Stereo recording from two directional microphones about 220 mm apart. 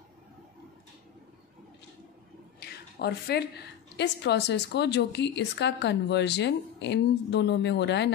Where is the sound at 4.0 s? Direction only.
50° left (ahead or behind).